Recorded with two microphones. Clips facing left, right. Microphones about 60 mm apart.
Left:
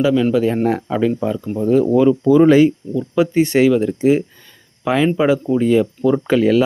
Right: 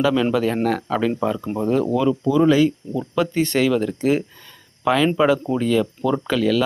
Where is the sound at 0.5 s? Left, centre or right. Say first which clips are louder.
Left 3 dB; left; by 1.5 s centre.